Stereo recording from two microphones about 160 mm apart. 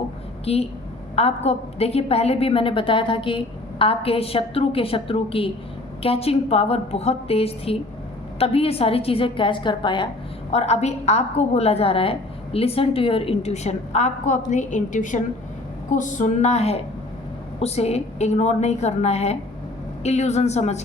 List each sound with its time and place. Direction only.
0.4 s a woman's voice: 40° left (ahead or behind)
10.5 s a woman's voice: 40° left (ahead or behind)